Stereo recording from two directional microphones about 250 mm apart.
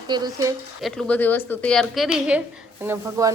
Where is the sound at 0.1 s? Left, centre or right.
Centre.